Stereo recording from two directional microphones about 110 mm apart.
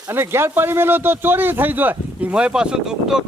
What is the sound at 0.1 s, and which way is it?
Speech, 20° right (ahead or behind).